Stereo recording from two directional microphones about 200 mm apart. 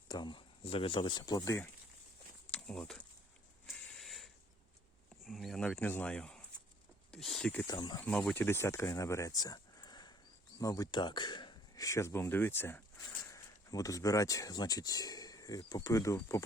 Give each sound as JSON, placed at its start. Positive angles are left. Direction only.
{"t": 0.1, "sound": "speech", "side_deg": 25}
{"t": 2.5, "sound": "a sound", "side_deg": 5}
{"t": 5.2, "sound": "speech", "side_deg": 0}
{"t": 7.7, "sound": "speech", "side_deg": 20}
{"t": 8.0, "sound": "speech", "side_deg": 5}